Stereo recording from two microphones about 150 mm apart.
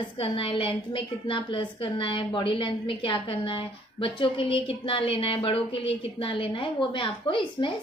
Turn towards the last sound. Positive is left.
turn(degrees=35)  # may be behind; listen again after turning